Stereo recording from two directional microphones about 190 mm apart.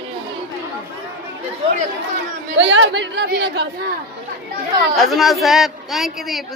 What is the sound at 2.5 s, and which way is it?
A woman's voice, 70° right (ahead or behind).